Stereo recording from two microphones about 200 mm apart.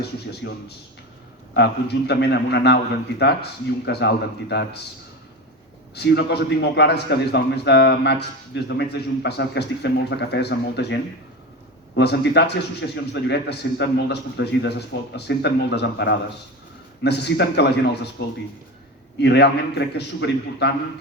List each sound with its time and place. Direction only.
0.4 s a man's voice: 55° left (ahead or behind)
5.9 s a man's voice: 55° left (ahead or behind)
19.2 s a man's voice: 55° left (ahead or behind)